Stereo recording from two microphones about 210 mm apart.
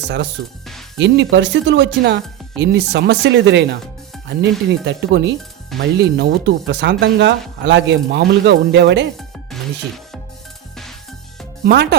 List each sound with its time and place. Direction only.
0.4 s speech: 55° right (ahead or behind)
11.6 s speech: 50° right (ahead or behind)